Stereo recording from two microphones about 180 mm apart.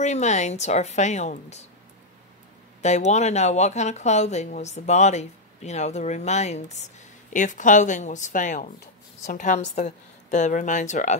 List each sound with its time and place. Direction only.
0.0 s speech: 40° left (ahead or behind)
2.8 s speech: 40° left (ahead or behind)